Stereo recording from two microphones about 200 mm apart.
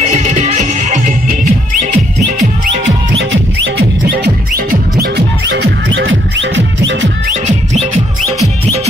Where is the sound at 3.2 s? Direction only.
60° right (ahead or behind).